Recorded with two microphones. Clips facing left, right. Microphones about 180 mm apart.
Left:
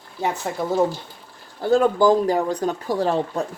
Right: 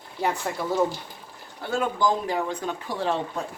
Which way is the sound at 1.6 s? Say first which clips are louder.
Left 8 dB; 40° left (ahead or behind).